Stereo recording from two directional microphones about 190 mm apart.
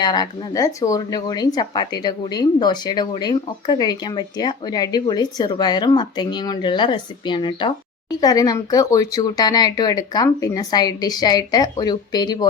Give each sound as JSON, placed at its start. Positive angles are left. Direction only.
{"t": 0.0, "sound": "speech", "side_deg": 20}